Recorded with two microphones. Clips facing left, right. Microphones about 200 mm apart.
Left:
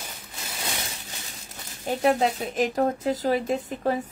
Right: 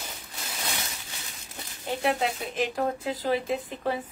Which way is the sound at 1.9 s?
40° left (ahead or behind).